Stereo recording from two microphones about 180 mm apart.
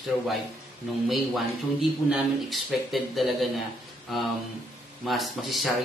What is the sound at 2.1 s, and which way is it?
A man's voice, centre (ahead or behind).